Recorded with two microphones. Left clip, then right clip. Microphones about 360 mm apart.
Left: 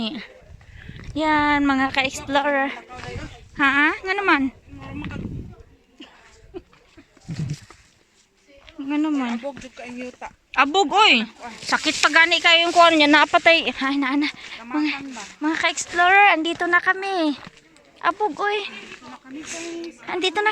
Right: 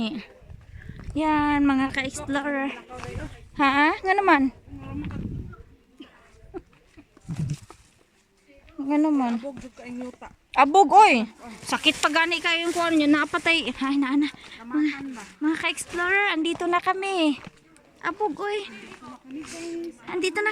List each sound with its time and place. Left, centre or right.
0.0 s speech: centre
3.5 s speech: centre
8.9 s speech: centre
9.7 s speech: left
10.5 s speech: centre
20.0 s speech: centre